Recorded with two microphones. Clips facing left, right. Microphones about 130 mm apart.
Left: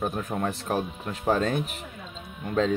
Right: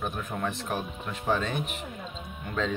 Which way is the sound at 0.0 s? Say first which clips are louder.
Left 4 dB; 35° left (ahead or behind).